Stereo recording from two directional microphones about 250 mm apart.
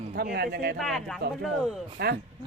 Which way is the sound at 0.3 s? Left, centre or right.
Right.